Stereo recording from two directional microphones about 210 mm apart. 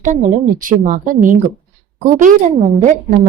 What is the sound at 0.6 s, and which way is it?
Speech, 40° right (ahead or behind).